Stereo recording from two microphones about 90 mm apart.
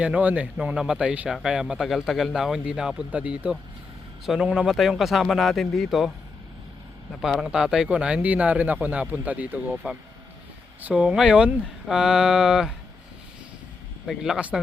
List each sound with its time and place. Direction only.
0.0 s a man's voice: 15° right (ahead or behind)
7.1 s speech: centre (ahead or behind)
14.1 s a man's voice: 5° right (ahead or behind)